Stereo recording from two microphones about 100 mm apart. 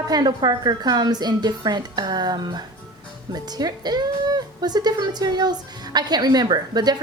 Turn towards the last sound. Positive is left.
turn(degrees=-45)  # may be behind; listen again after turning